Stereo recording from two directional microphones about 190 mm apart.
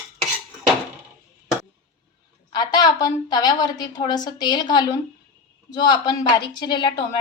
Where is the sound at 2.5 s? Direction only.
20° left (ahead or behind).